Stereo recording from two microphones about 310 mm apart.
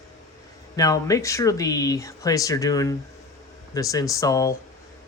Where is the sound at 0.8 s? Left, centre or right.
Centre.